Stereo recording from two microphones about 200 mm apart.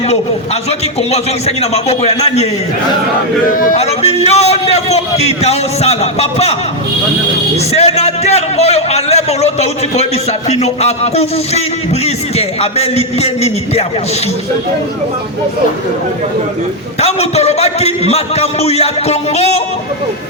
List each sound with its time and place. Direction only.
1.1 s a man's voice: 30° left (ahead or behind)
3.5 s a man's voice: 45° left (ahead or behind)
7.7 s a man's voice: 30° left (ahead or behind)
17.0 s a man's voice: 30° left (ahead or behind)